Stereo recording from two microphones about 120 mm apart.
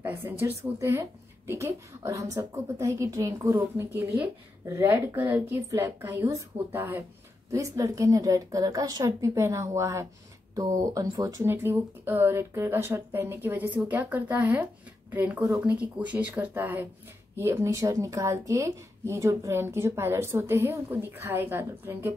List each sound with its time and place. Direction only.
0.0 s a woman's voice: 20° right (ahead or behind)